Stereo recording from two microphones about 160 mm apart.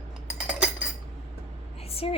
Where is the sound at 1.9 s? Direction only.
35° left (ahead or behind).